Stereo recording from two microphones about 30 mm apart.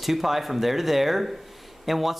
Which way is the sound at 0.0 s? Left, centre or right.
Centre.